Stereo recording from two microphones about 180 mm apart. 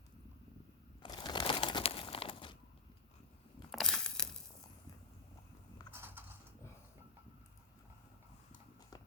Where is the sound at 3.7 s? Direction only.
Centre (ahead or behind).